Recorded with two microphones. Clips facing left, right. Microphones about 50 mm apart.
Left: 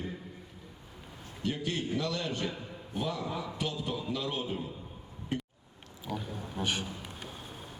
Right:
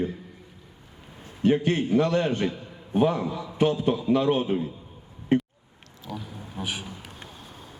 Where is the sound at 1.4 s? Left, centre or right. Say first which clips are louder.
Right 11 dB; right.